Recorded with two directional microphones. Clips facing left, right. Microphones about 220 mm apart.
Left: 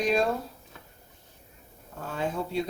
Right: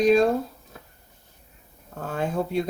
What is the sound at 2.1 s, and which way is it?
Speech, 50° right (ahead or behind).